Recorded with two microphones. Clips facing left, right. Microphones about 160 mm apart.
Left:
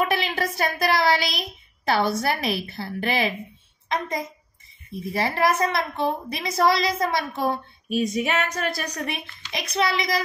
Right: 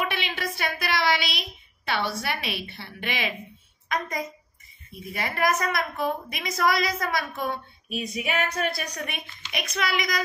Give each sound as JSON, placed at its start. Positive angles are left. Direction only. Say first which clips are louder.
{"t": 0.0, "sound": "a sound", "louder": "left 6 dB", "side_deg": 40}
{"t": 1.9, "sound": "a woman's voice", "louder": "left 6 dB", "side_deg": 40}
{"t": 5.1, "sound": "a woman's voice", "louder": "left 3 dB", "side_deg": 30}